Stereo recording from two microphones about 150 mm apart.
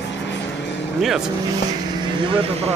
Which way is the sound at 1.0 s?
5° right (ahead or behind).